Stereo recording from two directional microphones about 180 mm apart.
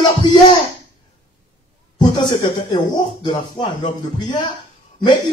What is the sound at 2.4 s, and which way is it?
Speech, 25° left (ahead or behind).